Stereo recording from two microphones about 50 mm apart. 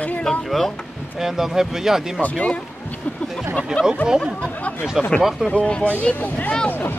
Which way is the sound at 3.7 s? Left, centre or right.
Centre.